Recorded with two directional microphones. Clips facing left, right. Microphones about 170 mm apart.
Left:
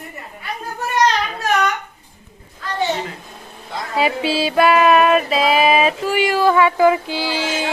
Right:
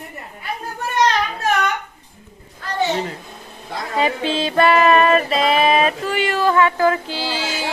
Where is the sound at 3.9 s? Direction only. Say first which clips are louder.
Left 1 dB; 10° left (ahead or behind).